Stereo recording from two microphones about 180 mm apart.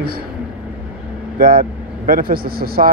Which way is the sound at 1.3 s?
55° right (ahead or behind).